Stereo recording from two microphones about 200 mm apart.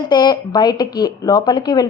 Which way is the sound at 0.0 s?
20° left (ahead or behind).